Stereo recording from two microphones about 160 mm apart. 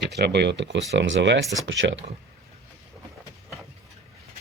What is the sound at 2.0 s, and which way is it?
Speech, 55° right (ahead or behind).